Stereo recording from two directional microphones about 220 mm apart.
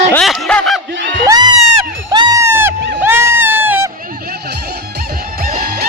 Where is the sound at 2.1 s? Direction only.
20° right (ahead or behind).